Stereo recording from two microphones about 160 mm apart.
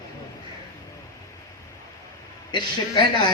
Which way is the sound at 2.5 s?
30° left (ahead or behind).